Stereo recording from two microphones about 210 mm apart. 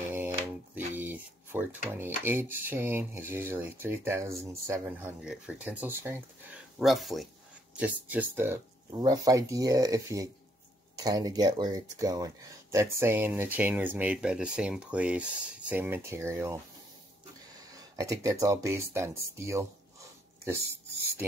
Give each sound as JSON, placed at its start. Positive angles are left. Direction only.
{"t": 0.1, "sound": "mantra", "side_deg": -10}
{"t": 0.9, "sound": "a sound", "side_deg": -10}
{"t": 1.9, "sound": "speech", "side_deg": -10}
{"t": 6.8, "sound": "speech", "side_deg": 0}
{"t": 17.7, "sound": "speech", "side_deg": -15}